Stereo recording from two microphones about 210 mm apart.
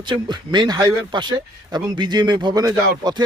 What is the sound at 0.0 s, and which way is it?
A man's voice, 20° right (ahead or behind).